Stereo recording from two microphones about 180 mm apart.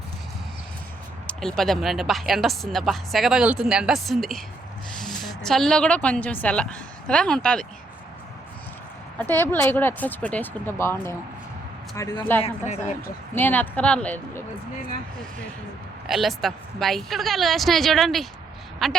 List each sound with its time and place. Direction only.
1.3 s a woman's voice: centre (ahead or behind)
9.1 s speech: 10° left (ahead or behind)
16.0 s speech: centre (ahead or behind)